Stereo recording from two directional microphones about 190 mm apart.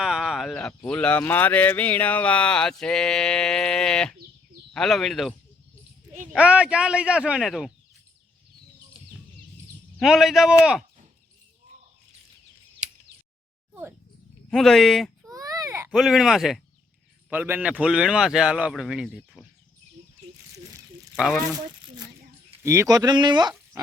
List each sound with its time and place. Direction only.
0.0 s speech: centre (ahead or behind)
6.3 s speech: 5° right (ahead or behind)
10.0 s speech: centre (ahead or behind)
14.5 s speech: centre (ahead or behind)
15.3 s baby cry: 20° right (ahead or behind)
15.9 s speech: centre (ahead or behind)
22.6 s speech: 15° right (ahead or behind)